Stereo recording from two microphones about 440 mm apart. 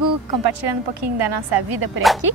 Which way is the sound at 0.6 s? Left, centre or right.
Right.